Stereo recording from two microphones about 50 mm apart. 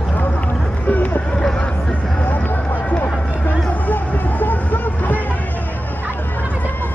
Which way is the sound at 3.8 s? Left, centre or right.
Left.